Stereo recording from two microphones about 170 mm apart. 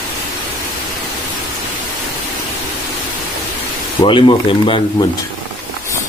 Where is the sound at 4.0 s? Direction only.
30° left (ahead or behind).